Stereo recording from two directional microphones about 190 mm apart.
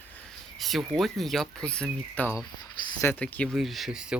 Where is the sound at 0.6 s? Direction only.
Centre (ahead or behind).